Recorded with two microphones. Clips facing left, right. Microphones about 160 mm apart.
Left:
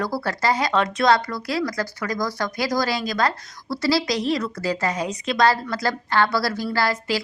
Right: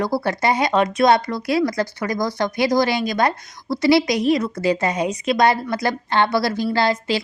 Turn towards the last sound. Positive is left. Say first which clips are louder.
# right 3 dB
turn(degrees=-20)  # may be behind; listen again after turning